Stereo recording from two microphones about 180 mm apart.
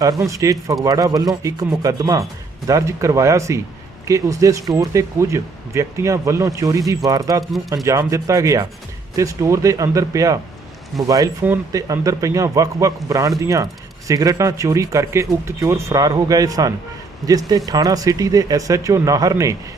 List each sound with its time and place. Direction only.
0.0 s speech: 20° right (ahead or behind)